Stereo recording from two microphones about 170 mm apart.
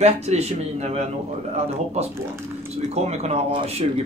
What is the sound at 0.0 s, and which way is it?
Speech, 40° right (ahead or behind).